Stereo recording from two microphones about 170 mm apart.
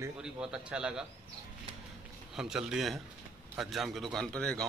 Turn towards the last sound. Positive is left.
turn(degrees=5)  # may be behind; listen again after turning